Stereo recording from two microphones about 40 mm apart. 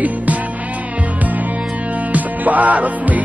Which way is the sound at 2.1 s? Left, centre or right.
Right.